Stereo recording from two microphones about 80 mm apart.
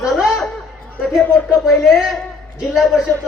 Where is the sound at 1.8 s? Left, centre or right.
Centre.